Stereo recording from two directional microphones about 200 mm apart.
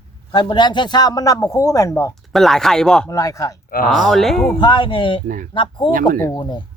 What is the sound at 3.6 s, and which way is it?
Speech, 45° left (ahead or behind).